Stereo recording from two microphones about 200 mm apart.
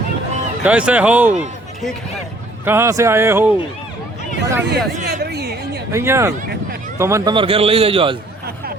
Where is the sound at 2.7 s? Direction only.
15° right (ahead or behind).